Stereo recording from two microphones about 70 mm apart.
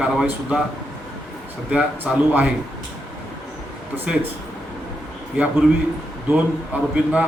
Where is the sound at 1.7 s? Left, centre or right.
Right.